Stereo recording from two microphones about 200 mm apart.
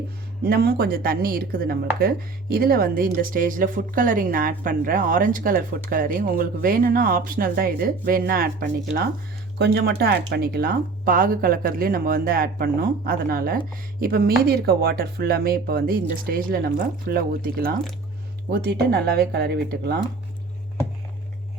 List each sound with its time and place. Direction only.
0.4 s speech: 50° right (ahead or behind)